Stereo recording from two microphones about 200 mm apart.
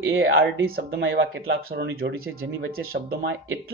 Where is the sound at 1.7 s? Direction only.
50° right (ahead or behind).